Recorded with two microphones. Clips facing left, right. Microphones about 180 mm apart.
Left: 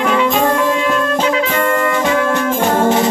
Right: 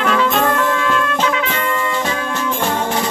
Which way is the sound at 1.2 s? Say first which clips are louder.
Left 4 dB; 35° left (ahead or behind).